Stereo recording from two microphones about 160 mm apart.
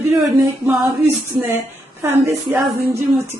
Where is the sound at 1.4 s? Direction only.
15° right (ahead or behind).